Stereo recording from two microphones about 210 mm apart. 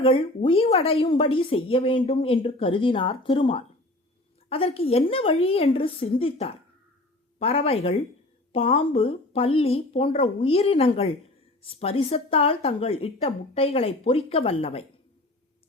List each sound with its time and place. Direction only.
0.0 s speech: 25° left (ahead or behind)